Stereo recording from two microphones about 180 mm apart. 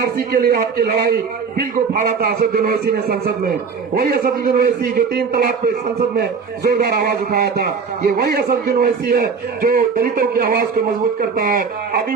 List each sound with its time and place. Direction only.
0.0 s a man's voice: 60° right (ahead or behind)